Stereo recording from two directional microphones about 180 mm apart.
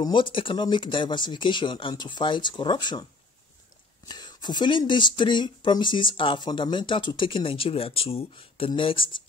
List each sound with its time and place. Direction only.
0.0 s speech: 25° left (ahead or behind)
4.1 s speech: 25° left (ahead or behind)